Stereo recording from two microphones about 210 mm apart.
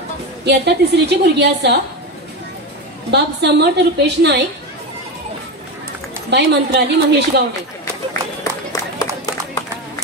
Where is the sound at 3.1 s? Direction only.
55° right (ahead or behind).